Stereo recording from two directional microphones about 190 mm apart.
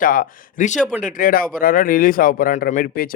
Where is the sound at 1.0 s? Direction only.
45° left (ahead or behind).